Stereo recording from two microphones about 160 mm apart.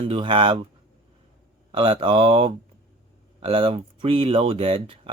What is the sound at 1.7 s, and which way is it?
Speech, 35° right (ahead or behind).